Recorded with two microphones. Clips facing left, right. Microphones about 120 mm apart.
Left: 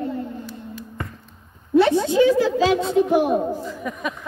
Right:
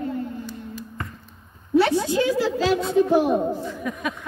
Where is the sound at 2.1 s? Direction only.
20° left (ahead or behind).